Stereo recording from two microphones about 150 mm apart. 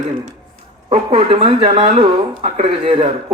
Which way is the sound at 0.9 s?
40° right (ahead or behind).